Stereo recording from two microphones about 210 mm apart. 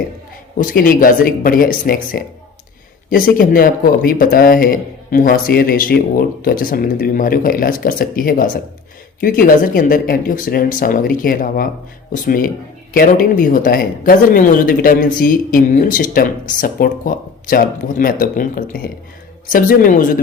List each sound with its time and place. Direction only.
0.6 s speech: 40° left (ahead or behind)